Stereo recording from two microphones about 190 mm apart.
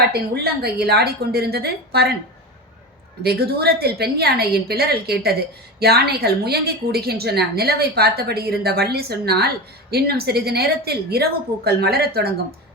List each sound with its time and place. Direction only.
0.6 s a woman's voice: 55° right (ahead or behind)
3.2 s a woman's voice: 55° right (ahead or behind)